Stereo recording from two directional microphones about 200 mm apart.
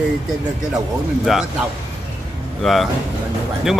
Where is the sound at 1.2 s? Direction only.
Centre (ahead or behind).